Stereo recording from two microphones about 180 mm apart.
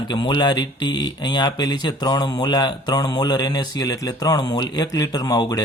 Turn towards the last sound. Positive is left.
turn(degrees=20)  # may be behind; listen again after turning